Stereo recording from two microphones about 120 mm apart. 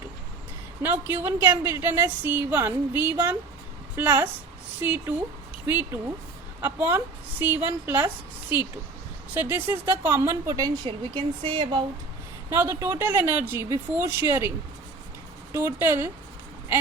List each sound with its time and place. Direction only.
0.8 s a woman's voice: 15° right (ahead or behind)
10.5 s a woman's voice: 35° right (ahead or behind)
12.9 s speech: 20° right (ahead or behind)
15.5 s speech: 20° right (ahead or behind)